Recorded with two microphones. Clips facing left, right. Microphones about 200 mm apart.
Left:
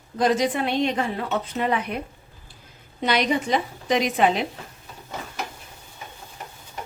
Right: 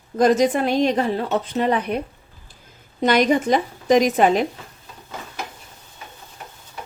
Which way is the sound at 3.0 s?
45° right (ahead or behind).